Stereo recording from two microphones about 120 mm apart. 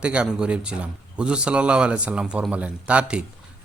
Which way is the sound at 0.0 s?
10° right (ahead or behind).